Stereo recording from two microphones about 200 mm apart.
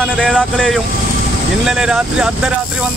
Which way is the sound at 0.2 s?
Centre (ahead or behind).